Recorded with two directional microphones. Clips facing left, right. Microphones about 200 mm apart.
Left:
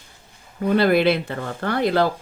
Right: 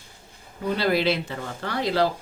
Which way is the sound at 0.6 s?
55° left (ahead or behind).